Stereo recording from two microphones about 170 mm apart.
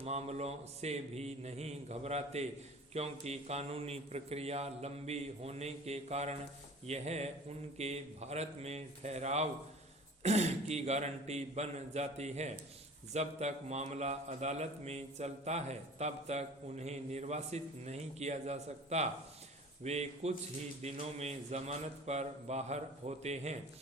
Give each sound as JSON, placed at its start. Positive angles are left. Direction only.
{"t": 0.0, "sound": "a man's voice", "side_deg": -40}